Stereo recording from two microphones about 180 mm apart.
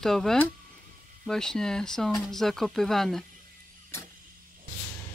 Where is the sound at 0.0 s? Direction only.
Centre (ahead or behind).